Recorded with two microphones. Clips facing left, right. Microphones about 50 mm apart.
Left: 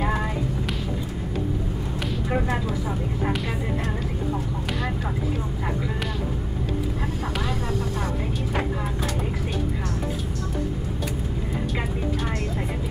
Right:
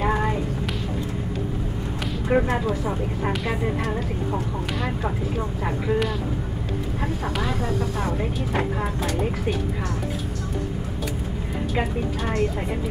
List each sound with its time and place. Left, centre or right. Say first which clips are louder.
2.2 s speech: right 5 dB; centre